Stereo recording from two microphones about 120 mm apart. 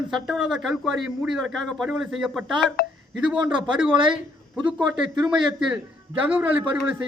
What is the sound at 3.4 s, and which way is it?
Speech, 40° right (ahead or behind).